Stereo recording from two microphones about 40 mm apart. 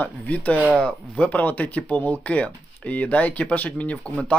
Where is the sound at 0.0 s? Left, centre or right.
Left.